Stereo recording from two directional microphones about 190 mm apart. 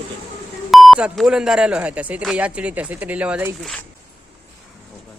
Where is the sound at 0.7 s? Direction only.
Centre (ahead or behind).